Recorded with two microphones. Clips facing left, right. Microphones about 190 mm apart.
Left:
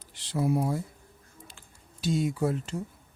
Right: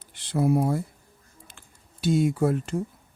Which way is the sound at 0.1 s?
55° right (ahead or behind).